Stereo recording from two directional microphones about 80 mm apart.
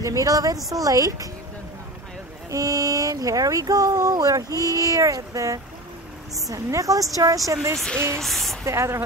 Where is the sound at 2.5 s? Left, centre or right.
Right.